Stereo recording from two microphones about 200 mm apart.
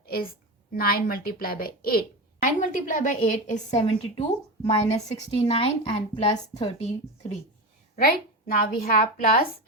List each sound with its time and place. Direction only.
0.0 s a sound: 50° left (ahead or behind)
0.7 s a woman's voice: 50° left (ahead or behind); by 7.3 s 30° left (ahead or behind)
7.9 s a woman's voice: 45° left (ahead or behind)